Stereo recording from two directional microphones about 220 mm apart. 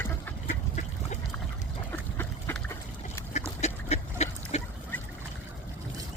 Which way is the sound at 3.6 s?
30° left (ahead or behind).